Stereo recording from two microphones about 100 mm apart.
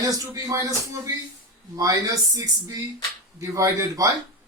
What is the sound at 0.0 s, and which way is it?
A man's voice, 35° right (ahead or behind).